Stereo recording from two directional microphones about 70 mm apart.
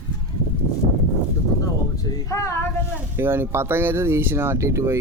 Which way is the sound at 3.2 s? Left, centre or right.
Right.